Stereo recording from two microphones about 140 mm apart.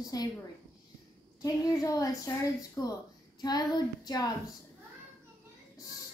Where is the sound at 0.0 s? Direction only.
25° left (ahead or behind).